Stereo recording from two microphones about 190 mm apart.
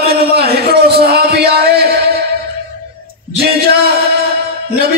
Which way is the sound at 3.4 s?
55° right (ahead or behind).